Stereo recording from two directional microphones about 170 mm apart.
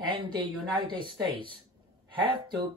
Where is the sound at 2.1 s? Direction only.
30° right (ahead or behind).